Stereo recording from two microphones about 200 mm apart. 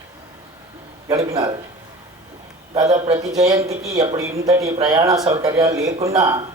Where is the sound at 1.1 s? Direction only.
15° right (ahead or behind).